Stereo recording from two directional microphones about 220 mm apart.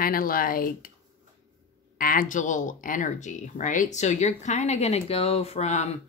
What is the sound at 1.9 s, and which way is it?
Speech, 40° left (ahead or behind).